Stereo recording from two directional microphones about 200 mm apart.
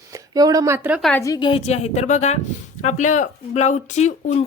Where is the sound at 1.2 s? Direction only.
20° left (ahead or behind).